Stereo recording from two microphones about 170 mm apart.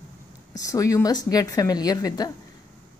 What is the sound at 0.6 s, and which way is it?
A woman's voice, 20° left (ahead or behind).